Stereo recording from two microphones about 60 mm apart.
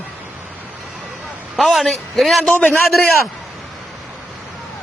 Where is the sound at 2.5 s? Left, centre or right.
Left.